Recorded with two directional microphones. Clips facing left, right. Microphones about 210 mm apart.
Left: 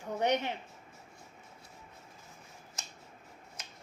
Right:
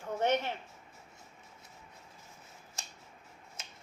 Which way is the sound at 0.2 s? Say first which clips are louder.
Even; 15° left (ahead or behind).